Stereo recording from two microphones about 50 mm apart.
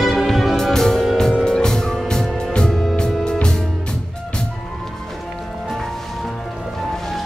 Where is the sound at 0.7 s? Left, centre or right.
Centre.